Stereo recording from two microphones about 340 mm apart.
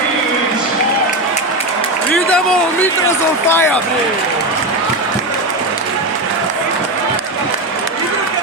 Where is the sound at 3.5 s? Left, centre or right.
Centre.